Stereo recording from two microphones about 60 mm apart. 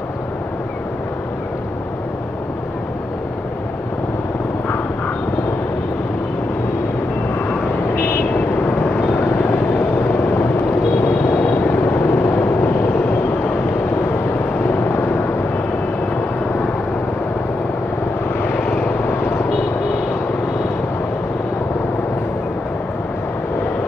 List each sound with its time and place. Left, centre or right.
7.3 s vehicle: left
18.4 s vehicle: left